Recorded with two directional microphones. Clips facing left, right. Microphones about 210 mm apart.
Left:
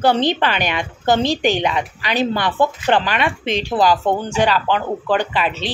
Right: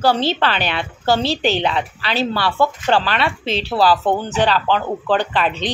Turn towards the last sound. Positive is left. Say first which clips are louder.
# right 1 dB
turn(degrees=5)  # may be behind; listen again after turning